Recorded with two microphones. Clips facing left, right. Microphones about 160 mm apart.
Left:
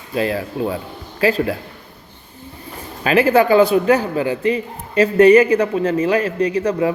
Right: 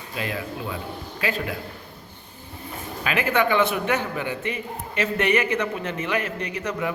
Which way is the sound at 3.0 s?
35° left (ahead or behind).